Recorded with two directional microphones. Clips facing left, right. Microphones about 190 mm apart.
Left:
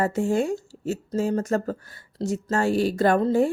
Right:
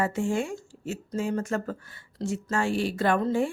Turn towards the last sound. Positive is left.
turn(degrees=40)  # may be behind; listen again after turning